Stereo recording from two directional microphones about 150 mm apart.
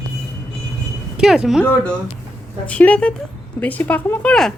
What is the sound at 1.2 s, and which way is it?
Speech, 5° right (ahead or behind).